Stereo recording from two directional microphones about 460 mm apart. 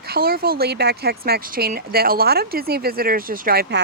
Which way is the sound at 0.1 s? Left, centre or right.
Centre.